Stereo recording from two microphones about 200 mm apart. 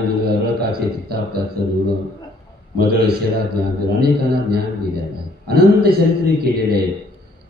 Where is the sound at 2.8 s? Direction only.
50° right (ahead or behind).